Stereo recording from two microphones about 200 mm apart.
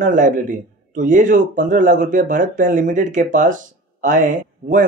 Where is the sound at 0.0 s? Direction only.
40° right (ahead or behind).